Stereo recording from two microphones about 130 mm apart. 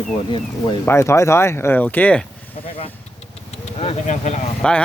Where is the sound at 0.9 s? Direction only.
20° left (ahead or behind).